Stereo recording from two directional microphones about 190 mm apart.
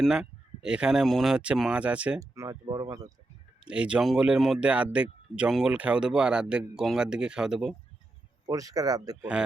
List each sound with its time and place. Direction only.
0.0 s speech: 5° right (ahead or behind); by 2.8 s 20° right (ahead or behind)
3.7 s speech: 5° right (ahead or behind)
8.4 s speech: 20° right (ahead or behind)